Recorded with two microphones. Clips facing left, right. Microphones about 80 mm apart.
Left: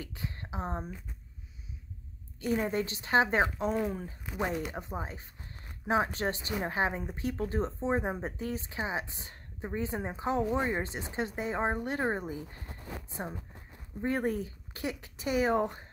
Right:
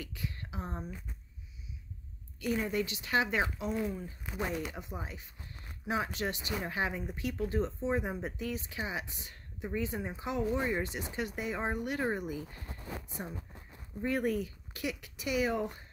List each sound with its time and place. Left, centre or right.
0.0 s a woman's voice: left
2.4 s speech: left